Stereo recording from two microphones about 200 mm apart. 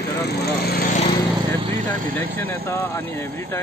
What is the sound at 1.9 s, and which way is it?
Speech, 40° right (ahead or behind).